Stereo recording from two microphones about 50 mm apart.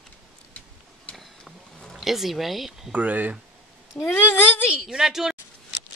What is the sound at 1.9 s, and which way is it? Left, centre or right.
Speech, centre.